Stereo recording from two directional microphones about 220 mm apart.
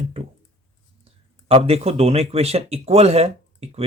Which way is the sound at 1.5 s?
25° right (ahead or behind).